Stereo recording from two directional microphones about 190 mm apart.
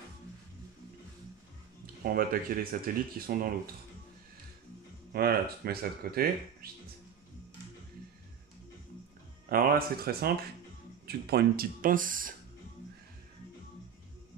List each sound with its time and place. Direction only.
2.0 s speech: 50° right (ahead or behind)
5.1 s speech: 55° right (ahead or behind)
9.5 s speech: 50° right (ahead or behind)